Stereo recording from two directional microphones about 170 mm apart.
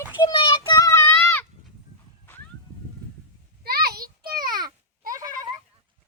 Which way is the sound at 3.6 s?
65° right (ahead or behind).